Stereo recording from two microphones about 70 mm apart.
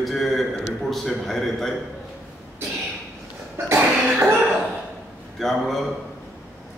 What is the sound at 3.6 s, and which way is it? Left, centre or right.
Cough, right.